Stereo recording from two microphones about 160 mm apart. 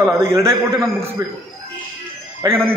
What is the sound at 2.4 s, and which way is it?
Speech, 10° right (ahead or behind).